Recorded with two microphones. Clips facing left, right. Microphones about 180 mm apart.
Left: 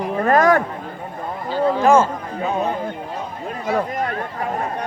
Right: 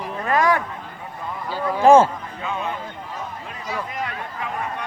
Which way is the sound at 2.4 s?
40° left (ahead or behind).